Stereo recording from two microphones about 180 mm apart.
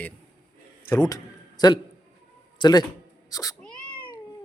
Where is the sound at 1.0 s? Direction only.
20° left (ahead or behind).